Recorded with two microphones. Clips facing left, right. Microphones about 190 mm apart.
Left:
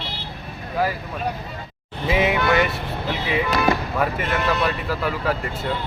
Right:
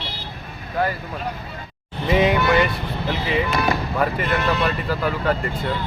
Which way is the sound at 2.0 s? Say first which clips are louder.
Right 2 dB; 5° left (ahead or behind).